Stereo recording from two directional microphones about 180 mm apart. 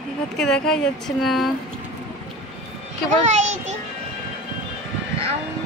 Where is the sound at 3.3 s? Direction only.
40° right (ahead or behind).